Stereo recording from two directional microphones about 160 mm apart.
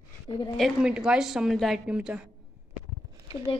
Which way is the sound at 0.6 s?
Centre (ahead or behind).